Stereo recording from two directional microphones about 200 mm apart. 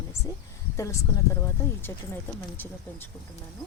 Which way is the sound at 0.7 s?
15° left (ahead or behind).